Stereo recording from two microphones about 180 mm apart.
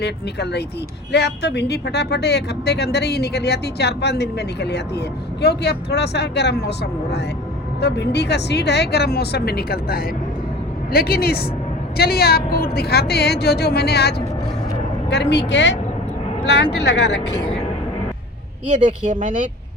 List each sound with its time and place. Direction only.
0.0 s a woman's voice: 65° left (ahead or behind)